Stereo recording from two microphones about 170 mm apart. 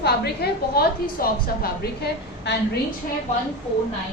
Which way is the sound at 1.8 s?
75° left (ahead or behind).